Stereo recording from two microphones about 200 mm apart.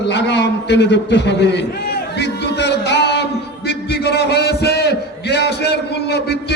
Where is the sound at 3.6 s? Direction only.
55° left (ahead or behind).